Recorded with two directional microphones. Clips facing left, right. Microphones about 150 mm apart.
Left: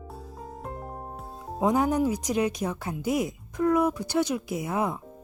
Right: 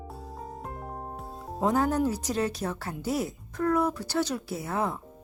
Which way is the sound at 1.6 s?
15° left (ahead or behind).